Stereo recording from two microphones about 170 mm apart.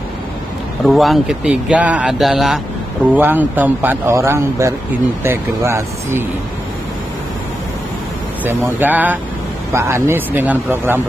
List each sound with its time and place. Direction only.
0.8 s a man's voice: centre (ahead or behind); by 6.2 s 15° right (ahead or behind)
8.5 s a man's voice: 10° right (ahead or behind)